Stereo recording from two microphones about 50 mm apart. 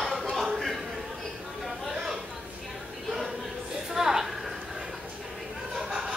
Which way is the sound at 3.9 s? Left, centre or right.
Centre.